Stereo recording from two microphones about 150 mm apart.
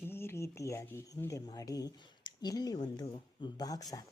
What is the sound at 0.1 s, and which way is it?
Speech, 15° left (ahead or behind).